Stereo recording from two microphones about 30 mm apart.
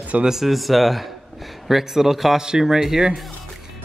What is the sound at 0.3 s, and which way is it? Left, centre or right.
Speech, centre.